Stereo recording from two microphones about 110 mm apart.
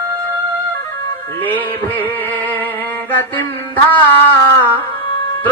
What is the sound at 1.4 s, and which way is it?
Music, 15° left (ahead or behind).